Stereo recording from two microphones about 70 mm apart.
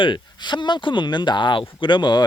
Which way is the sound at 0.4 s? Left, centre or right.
Left.